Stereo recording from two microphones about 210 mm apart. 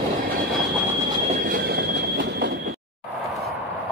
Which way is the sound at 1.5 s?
50° right (ahead or behind).